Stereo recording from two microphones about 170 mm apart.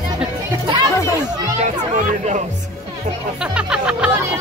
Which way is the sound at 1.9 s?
45° right (ahead or behind).